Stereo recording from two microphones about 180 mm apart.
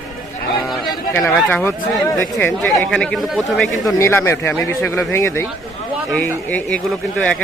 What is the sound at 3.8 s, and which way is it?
Speech, 15° left (ahead or behind).